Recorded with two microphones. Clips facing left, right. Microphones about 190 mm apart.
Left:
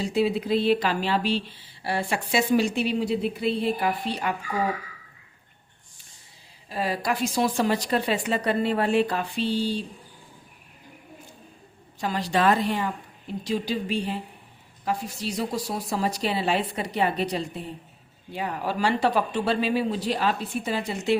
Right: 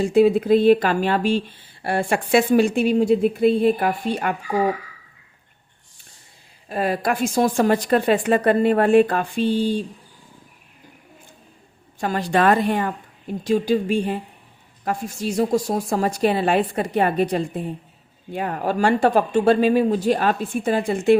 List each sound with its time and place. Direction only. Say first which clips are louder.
0.0 s speech: right 8 dB; 50° right (ahead or behind)
6.7 s speech: right 5 dB; 55° right (ahead or behind)
11.9 s speech: right 5 dB; 50° right (ahead or behind)